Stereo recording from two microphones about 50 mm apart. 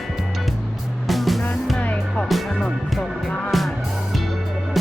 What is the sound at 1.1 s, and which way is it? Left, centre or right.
Music, centre.